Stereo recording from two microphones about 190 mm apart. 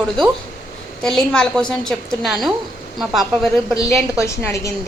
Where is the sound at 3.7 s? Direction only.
15° left (ahead or behind).